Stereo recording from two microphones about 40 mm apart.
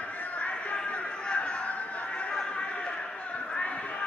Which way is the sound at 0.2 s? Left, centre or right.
Left.